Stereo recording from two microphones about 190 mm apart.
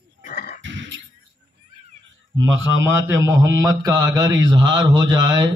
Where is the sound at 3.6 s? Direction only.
20° right (ahead or behind).